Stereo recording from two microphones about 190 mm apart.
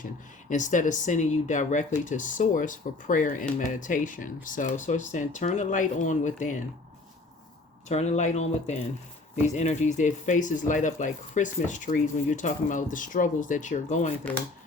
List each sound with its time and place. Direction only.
0.5 s speech: 40° left (ahead or behind)
7.9 s speech: 35° left (ahead or behind)